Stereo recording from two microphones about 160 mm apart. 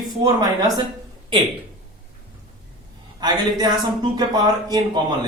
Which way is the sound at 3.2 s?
25° right (ahead or behind).